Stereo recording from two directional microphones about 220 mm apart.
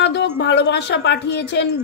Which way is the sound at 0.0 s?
55° left (ahead or behind).